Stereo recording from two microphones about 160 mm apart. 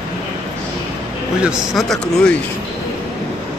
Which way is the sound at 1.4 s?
Centre (ahead or behind).